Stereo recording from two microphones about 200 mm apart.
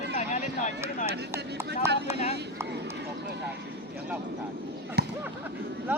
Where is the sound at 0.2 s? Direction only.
35° left (ahead or behind).